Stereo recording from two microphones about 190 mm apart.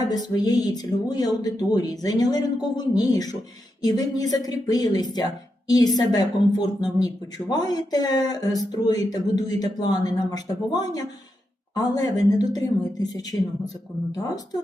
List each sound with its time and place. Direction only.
0.1 s speech: 20° left (ahead or behind)